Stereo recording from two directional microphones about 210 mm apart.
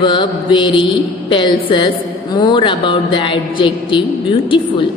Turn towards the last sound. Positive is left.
turn(degrees=25)  # may be behind; listen again after turning